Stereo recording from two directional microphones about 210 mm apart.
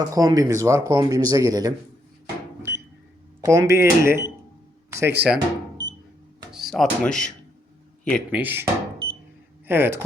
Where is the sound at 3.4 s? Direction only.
15° right (ahead or behind).